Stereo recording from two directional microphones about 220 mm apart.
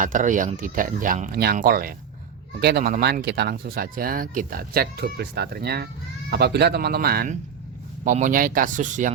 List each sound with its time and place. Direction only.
0.0 s speech: 35° right (ahead or behind)